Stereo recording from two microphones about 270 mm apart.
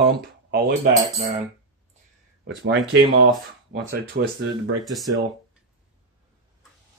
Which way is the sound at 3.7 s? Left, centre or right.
Right.